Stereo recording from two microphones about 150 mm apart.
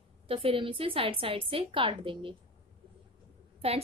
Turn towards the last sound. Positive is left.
turn(degrees=-40)  # may be behind; listen again after turning